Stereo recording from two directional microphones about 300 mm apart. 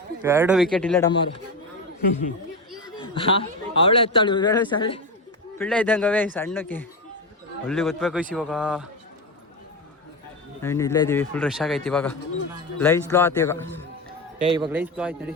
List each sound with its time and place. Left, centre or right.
0.2 s a man's voice: centre
3.0 s a man's voice: centre
5.5 s a man's voice: centre
10.6 s a man's voice: centre
14.4 s a man's voice: centre
14.7 s a man's voice: centre